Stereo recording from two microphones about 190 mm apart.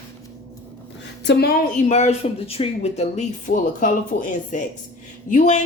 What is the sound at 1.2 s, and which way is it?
Speech, 60° left (ahead or behind).